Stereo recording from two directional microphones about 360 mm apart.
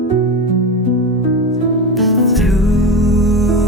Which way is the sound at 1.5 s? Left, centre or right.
Centre.